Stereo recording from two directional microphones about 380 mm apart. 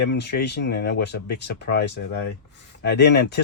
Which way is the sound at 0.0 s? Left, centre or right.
Left.